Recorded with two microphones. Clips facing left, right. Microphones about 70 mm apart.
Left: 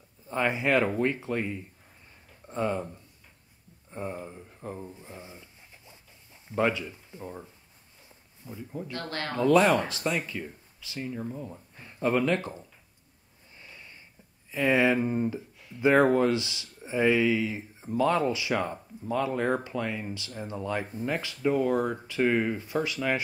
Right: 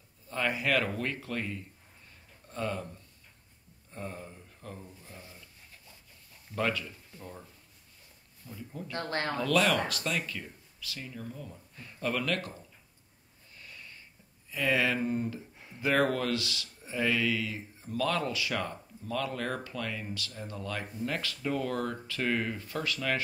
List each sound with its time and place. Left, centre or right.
0.3 s speech: left
8.5 s speech: centre
8.9 s speech: right
9.3 s speech: left
13.6 s a sound: left
14.5 s speech: left